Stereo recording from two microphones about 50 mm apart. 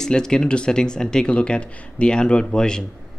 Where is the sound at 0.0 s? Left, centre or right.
Centre.